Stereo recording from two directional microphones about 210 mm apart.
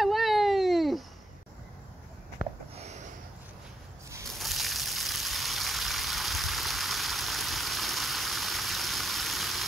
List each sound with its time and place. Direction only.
0.0 s baby cry: centre (ahead or behind)
2.7 s a sound: 30° right (ahead or behind)
4.3 s vehicle: centre (ahead or behind)